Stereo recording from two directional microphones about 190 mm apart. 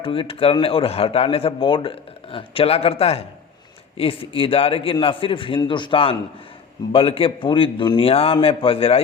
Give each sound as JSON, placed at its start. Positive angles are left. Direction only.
{"t": 0.0, "sound": "speech", "side_deg": 30}